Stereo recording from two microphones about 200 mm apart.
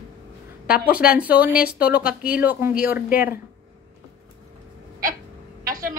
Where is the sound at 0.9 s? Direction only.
50° left (ahead or behind).